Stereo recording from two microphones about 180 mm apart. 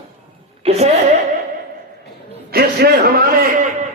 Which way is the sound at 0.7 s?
35° right (ahead or behind).